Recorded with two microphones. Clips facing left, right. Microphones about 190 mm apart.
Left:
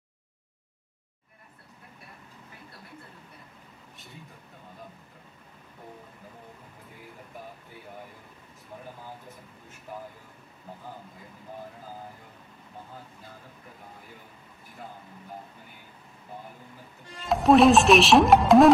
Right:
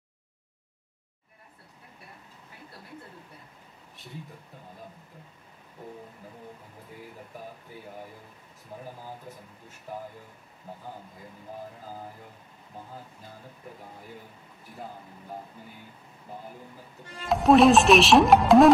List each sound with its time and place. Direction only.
17.3 s speech: centre (ahead or behind)